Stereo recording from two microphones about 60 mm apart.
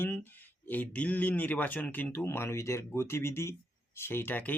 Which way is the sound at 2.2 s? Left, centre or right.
Left.